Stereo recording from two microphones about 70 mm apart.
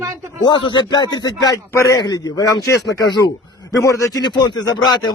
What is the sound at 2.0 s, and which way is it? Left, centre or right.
A man's voice, left.